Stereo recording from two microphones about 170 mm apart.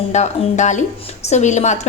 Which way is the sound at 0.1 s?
45° left (ahead or behind).